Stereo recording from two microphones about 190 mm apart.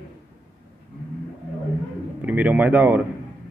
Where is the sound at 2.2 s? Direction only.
10° right (ahead or behind).